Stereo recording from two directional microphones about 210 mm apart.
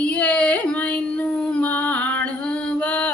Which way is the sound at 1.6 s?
10° left (ahead or behind).